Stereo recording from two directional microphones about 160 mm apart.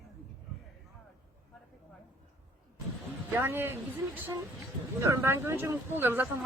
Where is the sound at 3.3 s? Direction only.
15° right (ahead or behind).